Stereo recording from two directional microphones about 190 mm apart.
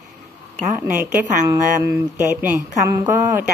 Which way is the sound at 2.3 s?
15° right (ahead or behind).